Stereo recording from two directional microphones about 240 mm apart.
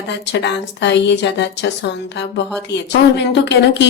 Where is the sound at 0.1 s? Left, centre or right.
Left.